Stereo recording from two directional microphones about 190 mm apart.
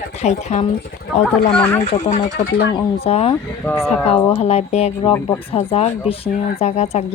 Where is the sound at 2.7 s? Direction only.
30° left (ahead or behind).